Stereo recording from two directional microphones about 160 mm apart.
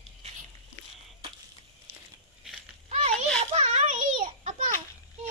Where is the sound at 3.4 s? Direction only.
45° right (ahead or behind).